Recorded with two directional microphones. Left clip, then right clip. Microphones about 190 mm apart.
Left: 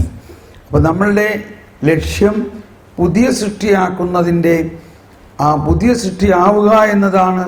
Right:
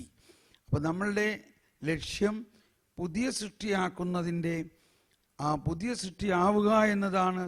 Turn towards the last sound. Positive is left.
turn(degrees=-30)  # may be behind; listen again after turning